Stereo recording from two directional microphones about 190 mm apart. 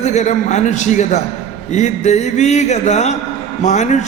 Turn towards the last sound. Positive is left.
turn(degrees=40)  # may be behind; listen again after turning